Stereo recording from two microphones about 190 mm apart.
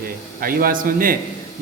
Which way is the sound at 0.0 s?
50° right (ahead or behind).